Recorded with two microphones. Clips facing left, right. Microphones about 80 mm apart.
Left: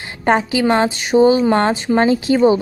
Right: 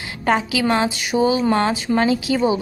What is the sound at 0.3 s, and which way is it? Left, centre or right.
A woman's voice, left.